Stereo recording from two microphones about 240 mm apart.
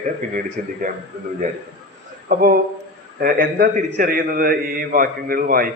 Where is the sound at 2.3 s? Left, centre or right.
Right.